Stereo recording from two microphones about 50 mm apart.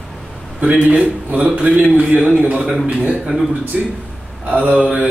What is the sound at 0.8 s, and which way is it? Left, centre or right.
A man's voice, right.